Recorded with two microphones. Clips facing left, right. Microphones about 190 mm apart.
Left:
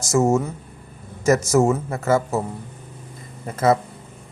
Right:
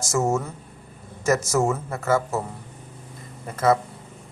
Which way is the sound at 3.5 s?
20° left (ahead or behind).